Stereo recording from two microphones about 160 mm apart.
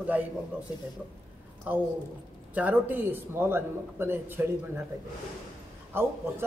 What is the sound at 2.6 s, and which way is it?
A man's voice, 10° right (ahead or behind).